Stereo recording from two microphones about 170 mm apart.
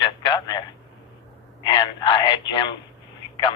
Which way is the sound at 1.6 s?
25° left (ahead or behind).